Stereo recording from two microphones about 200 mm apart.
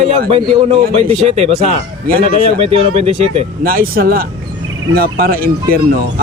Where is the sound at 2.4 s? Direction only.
30° right (ahead or behind).